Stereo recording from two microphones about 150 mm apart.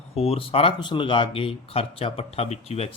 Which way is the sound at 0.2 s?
40° left (ahead or behind).